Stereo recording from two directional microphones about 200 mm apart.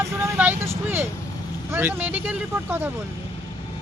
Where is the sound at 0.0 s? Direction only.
10° right (ahead or behind).